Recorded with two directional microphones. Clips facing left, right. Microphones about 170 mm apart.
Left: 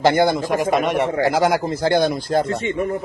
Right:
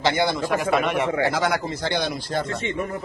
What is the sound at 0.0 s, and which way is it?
Speech, 50° left (ahead or behind).